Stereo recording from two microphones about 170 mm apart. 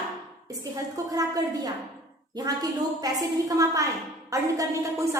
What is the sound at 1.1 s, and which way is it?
A woman's voice, 20° right (ahead or behind).